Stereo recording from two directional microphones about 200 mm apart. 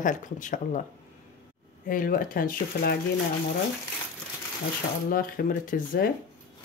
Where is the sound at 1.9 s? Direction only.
45° left (ahead or behind).